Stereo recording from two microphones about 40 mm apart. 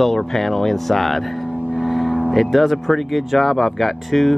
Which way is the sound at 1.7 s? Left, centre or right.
Centre.